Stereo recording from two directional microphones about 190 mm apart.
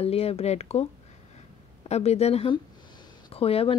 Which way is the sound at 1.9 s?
35° left (ahead or behind).